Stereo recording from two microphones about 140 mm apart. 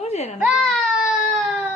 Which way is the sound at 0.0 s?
50° left (ahead or behind).